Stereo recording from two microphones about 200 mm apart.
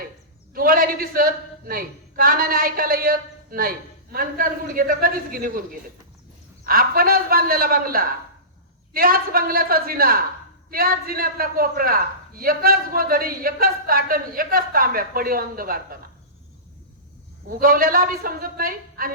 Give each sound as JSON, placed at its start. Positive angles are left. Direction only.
{"t": 0.5, "sound": "a man's voice", "side_deg": -45}
{"t": 6.7, "sound": "a man's voice", "side_deg": -45}
{"t": 17.5, "sound": "a man's voice", "side_deg": -45}